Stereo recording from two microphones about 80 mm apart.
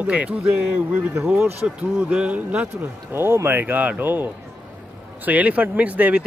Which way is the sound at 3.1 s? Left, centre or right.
Right.